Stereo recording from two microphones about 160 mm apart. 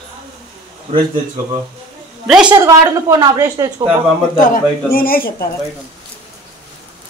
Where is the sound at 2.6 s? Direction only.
20° right (ahead or behind).